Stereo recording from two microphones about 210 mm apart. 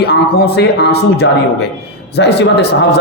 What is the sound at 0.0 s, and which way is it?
A man's voice, 50° left (ahead or behind).